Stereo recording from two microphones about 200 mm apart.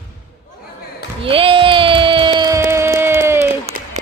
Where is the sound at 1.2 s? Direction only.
25° right (ahead or behind).